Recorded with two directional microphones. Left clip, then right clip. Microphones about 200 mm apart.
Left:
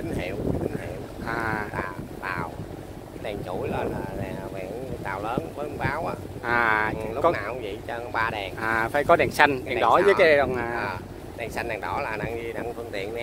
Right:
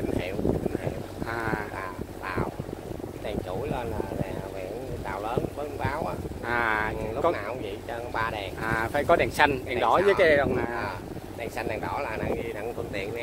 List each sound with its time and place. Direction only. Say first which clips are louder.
1.2 s sheep: left 2 dB; 10° left (ahead or behind)
1.8 s a sound: left 3 dB; 25° left (ahead or behind)
5.0 s boat: left 1 dB; 30° left (ahead or behind)
6.4 s a sound: left 4 dB; 15° left (ahead or behind)
8.5 s speech: left 3 dB; 15° left (ahead or behind)
11.5 s speech: left 2 dB; 30° left (ahead or behind)